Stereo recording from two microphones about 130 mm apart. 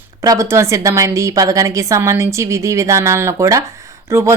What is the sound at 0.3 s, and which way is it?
Speech, 20° right (ahead or behind).